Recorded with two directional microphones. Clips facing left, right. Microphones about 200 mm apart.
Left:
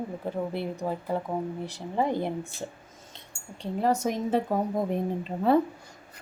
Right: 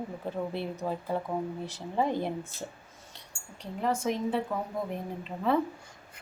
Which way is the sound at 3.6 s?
40° left (ahead or behind).